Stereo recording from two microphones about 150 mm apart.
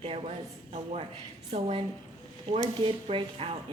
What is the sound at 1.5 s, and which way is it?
Speech, 40° right (ahead or behind).